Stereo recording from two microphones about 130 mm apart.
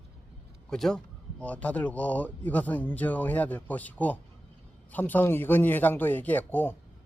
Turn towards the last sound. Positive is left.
turn(degrees=15)  # may be behind; listen again after turning